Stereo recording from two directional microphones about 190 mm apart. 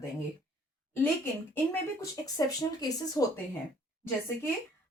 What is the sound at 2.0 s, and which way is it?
Speech, 20° left (ahead or behind).